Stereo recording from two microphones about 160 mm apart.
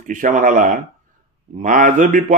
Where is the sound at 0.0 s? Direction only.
55° right (ahead or behind).